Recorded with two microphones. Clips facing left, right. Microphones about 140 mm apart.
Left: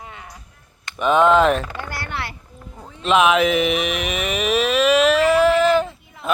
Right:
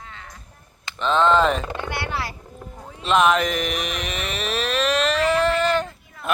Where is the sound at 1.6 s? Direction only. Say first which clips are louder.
Right 2 dB; 25° right (ahead or behind).